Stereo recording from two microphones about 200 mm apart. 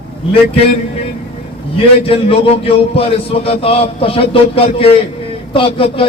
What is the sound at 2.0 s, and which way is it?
Speech, 30° left (ahead or behind).